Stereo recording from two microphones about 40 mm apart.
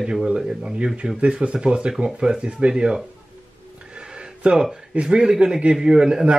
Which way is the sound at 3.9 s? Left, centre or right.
Right.